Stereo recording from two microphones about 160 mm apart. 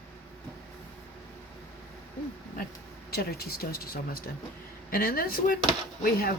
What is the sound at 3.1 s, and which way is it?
Speech, 75° left (ahead or behind).